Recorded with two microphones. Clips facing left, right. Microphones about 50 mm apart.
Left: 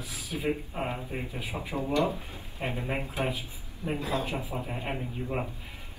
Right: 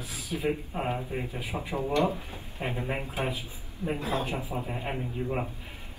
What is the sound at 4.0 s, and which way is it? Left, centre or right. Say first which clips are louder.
Speech: even; right.